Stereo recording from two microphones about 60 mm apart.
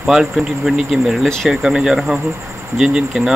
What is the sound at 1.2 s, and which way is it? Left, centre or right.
Speech, centre.